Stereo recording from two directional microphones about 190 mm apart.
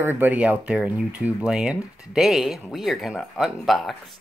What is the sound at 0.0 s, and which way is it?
Speech, 10° right (ahead or behind).